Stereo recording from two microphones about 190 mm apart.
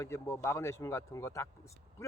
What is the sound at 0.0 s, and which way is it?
Speech, 15° left (ahead or behind).